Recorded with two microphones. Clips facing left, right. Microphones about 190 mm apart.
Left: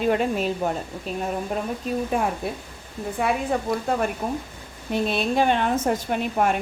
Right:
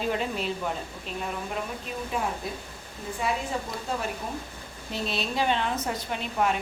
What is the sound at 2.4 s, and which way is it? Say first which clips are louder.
A woman's voice: left 5 dB; 60° left (ahead or behind).